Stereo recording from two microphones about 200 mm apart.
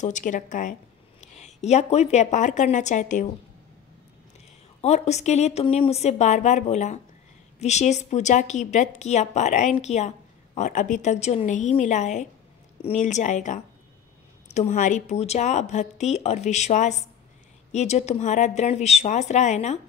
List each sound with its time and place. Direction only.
0.0 s a woman's voice: 40° left (ahead or behind)
4.8 s a woman's voice: 35° left (ahead or behind)